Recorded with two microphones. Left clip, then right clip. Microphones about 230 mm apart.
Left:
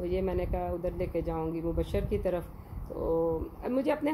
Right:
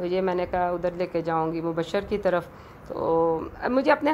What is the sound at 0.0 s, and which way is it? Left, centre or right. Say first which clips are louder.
A woman's voice: right 6 dB; centre.